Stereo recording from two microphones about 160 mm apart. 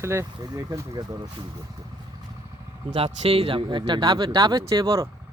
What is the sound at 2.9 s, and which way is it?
Speech, 40° right (ahead or behind).